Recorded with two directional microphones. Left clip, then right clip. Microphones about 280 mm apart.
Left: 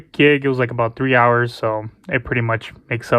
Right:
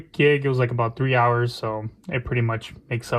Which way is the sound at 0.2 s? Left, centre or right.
Left.